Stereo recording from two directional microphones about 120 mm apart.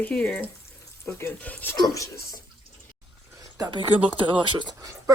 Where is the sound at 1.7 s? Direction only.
30° left (ahead or behind).